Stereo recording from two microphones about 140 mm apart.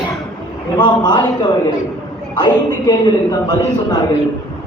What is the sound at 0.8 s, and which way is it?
Speech, 30° left (ahead or behind).